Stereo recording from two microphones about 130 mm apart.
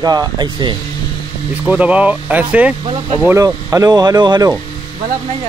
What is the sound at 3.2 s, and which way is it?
Speech, 25° right (ahead or behind).